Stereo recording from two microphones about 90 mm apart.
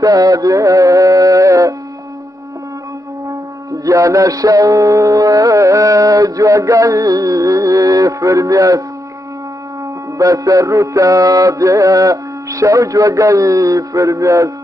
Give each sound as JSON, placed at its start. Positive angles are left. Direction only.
{"t": 0.0, "sound": "music", "side_deg": -40}
{"t": 3.8, "sound": "music", "side_deg": -35}
{"t": 10.1, "sound": "music", "side_deg": -40}